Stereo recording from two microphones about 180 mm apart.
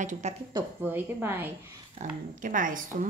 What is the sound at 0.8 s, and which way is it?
Speech, 10° right (ahead or behind).